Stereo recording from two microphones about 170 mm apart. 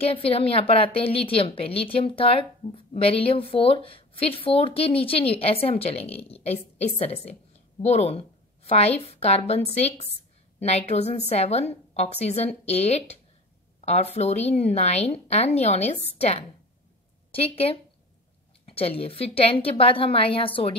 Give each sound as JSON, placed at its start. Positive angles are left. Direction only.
{"t": 0.0, "sound": "a woman's voice", "side_deg": 35}